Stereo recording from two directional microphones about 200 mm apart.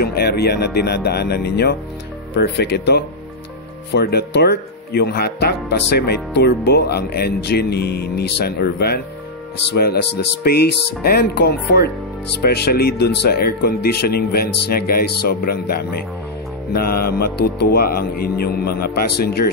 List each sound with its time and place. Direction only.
0.0 s speech: 50° left (ahead or behind)